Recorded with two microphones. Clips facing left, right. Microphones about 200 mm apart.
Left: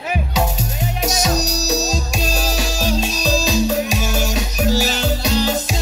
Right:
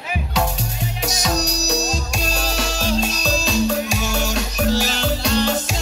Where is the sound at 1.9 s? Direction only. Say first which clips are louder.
Left 3 dB; centre (ahead or behind).